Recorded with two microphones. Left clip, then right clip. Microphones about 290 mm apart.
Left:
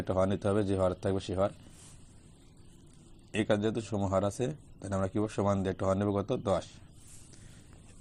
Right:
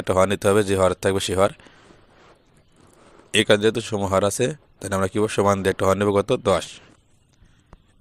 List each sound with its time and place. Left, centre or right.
0.0 s speech: right
3.3 s speech: right